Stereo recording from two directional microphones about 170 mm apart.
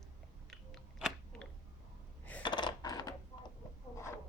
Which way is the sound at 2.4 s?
25° left (ahead or behind).